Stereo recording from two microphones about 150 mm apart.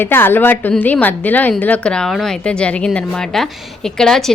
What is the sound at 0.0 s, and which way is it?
A woman's voice, 15° left (ahead or behind).